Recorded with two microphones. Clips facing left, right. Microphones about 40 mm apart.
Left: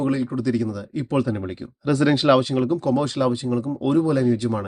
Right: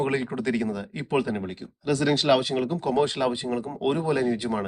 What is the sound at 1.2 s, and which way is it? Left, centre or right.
Speech, centre.